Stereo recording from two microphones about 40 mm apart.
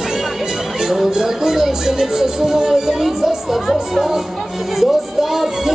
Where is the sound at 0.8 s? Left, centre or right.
Centre.